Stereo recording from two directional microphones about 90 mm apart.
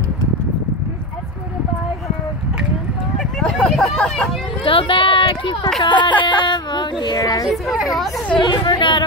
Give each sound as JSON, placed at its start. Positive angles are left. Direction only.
{"t": 3.2, "sound": "a sound", "side_deg": 5}
{"t": 4.6, "sound": "a sound", "side_deg": 80}
{"t": 5.8, "sound": "speech", "side_deg": 60}
{"t": 6.2, "sound": "whimper", "side_deg": 60}
{"t": 7.4, "sound": "a child's voice", "side_deg": 0}
{"t": 8.5, "sound": "speech", "side_deg": 60}